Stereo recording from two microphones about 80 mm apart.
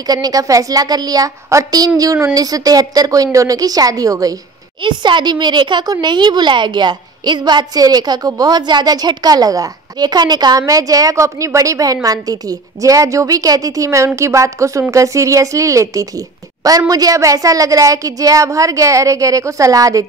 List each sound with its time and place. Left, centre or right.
0.0 s a woman's voice: right
4.8 s speech: right
10.6 s a woman's voice: right